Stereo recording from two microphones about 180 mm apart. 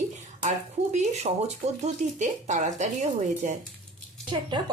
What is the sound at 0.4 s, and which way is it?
Speech, 40° right (ahead or behind).